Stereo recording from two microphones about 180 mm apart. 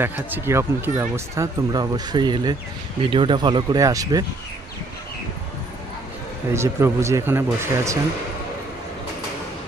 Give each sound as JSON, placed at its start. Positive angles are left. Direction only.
{"t": 0.0, "sound": "speech", "side_deg": -10}
{"t": 6.5, "sound": "speech", "side_deg": -15}